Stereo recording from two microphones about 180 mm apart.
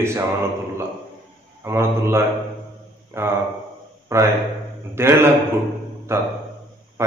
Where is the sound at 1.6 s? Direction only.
15° right (ahead or behind).